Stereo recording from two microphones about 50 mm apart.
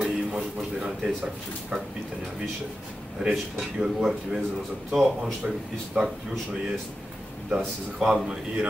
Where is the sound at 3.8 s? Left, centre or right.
Centre.